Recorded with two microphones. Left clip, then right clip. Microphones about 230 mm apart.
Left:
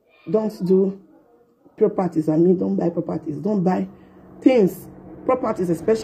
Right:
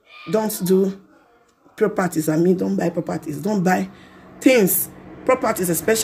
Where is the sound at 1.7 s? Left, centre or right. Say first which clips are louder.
Even; right.